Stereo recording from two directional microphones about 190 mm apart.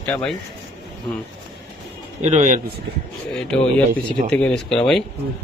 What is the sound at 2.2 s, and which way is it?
Speech, 35° right (ahead or behind).